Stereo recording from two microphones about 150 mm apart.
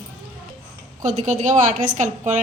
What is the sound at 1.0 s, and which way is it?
A woman's voice, 55° right (ahead or behind).